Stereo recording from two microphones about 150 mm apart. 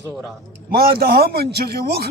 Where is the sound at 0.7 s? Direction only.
90° right.